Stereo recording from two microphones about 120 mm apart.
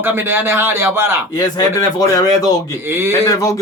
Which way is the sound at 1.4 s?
35° left (ahead or behind).